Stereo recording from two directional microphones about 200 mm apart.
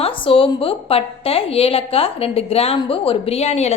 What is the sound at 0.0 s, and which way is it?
A woman's voice, 25° left (ahead or behind).